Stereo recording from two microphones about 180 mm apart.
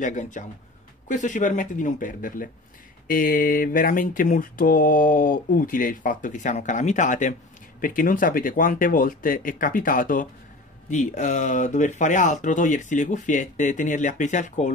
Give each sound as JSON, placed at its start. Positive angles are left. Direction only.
{"t": 0.0, "sound": "speech", "side_deg": 45}